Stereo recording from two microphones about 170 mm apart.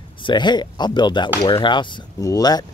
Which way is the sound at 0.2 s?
25° left (ahead or behind).